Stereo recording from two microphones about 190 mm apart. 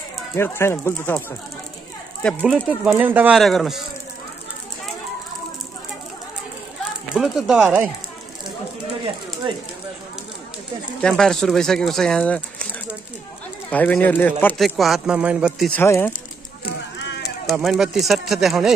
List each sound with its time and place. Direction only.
0.3 s speech: 15° left (ahead or behind)
2.2 s speech: centre (ahead or behind)
7.2 s speech: centre (ahead or behind)
9.5 s speech: 25° right (ahead or behind)
11.0 s speech: 5° left (ahead or behind)
13.7 s speech: 10° left (ahead or behind)
15.7 s speech: 10° left (ahead or behind)
17.0 s a sound: 65° left (ahead or behind)
17.5 s speech: centre (ahead or behind)